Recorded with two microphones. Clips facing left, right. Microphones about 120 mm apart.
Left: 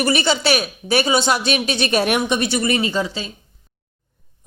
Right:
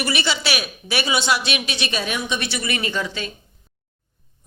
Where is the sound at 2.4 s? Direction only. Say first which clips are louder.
Left 7 dB; 40° left (ahead or behind).